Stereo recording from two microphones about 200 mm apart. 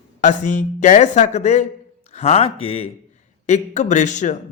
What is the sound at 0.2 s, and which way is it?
A man's voice, 40° left (ahead or behind).